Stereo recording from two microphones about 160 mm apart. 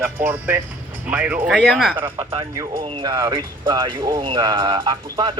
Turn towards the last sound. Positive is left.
turn(degrees=-30)  # may be behind; listen again after turning